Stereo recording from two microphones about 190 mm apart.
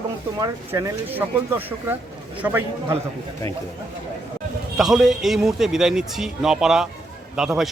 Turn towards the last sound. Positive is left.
turn(degrees=0)  # may be behind; listen again after turning